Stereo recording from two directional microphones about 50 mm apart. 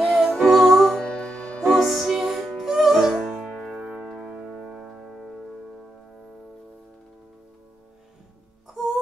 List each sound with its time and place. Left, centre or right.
0.0 s music: centre
0.9 s music: centre
1.6 s music: centre; by 5.0 s right
5.0 s music: centre
8.6 s music: centre